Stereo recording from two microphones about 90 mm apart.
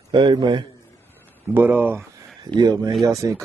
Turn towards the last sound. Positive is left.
turn(degrees=0)  # may be behind; listen again after turning